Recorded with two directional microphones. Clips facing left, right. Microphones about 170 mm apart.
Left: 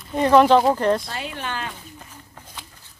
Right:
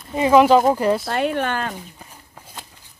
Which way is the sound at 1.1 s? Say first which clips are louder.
Right 9 dB; 60° right (ahead or behind).